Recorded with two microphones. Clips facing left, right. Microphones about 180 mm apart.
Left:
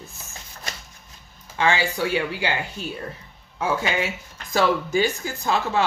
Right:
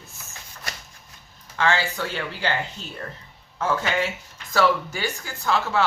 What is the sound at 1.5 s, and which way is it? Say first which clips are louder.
Speech: left 1 dB; 15° left (ahead or behind).